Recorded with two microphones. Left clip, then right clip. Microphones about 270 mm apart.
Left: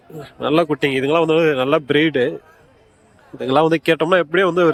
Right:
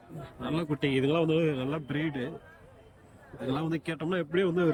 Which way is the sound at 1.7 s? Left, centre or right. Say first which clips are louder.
Left 18 dB; left.